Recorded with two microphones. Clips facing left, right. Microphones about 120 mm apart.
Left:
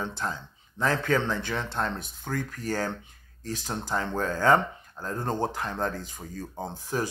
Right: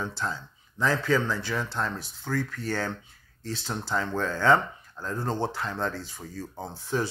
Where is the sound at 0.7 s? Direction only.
55° left (ahead or behind).